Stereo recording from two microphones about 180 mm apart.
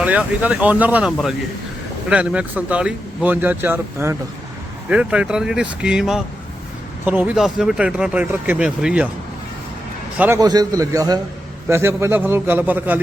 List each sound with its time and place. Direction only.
0.0 s speech: 10° right (ahead or behind)
10.2 s a man's voice: 15° right (ahead or behind)